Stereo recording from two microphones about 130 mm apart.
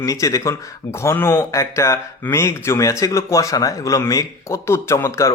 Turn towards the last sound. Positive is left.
turn(degrees=20)  # may be behind; listen again after turning